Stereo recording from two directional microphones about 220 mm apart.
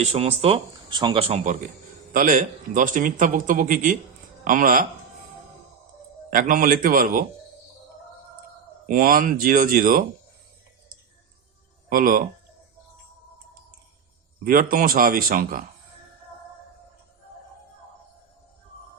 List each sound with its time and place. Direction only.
0.0 s a man's voice: 30° right (ahead or behind)
6.3 s a man's voice: 40° right (ahead or behind)
8.9 s a man's voice: 40° right (ahead or behind)
11.9 s speech: 40° right (ahead or behind)
14.4 s a man's voice: 40° right (ahead or behind)